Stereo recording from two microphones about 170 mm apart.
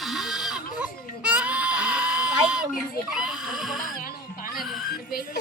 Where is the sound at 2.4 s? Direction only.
5° right (ahead or behind).